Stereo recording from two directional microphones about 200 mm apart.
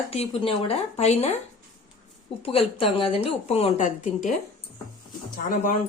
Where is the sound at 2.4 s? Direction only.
30° left (ahead or behind).